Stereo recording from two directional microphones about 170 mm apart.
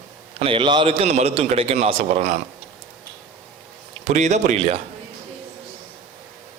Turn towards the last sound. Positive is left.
turn(degrees=-40)  # may be behind; listen again after turning